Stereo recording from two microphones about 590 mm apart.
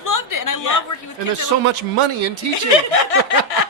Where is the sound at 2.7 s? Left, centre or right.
Left.